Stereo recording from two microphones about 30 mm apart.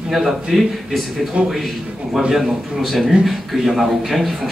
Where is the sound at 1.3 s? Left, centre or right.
Right.